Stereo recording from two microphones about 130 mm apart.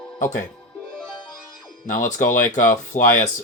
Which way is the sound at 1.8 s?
80° left.